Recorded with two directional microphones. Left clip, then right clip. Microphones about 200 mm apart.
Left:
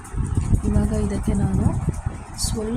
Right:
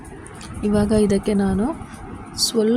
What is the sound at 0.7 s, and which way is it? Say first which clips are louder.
Speech: right 9 dB; 30° right (ahead or behind).